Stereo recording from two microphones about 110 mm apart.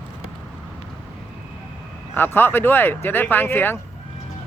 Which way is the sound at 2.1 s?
20° left (ahead or behind).